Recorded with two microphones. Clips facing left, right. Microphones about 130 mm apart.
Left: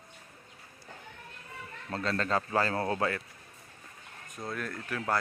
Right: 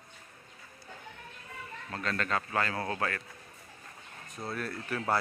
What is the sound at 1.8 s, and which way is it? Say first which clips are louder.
A man's voice: left 3 dB; 30° left (ahead or behind).